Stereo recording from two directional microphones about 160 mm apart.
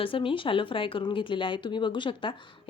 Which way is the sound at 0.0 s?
35° left (ahead or behind).